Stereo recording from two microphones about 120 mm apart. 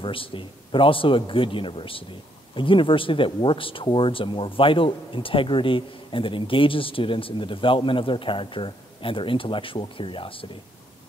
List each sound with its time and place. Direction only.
0.0 s speech: 45° left (ahead or behind)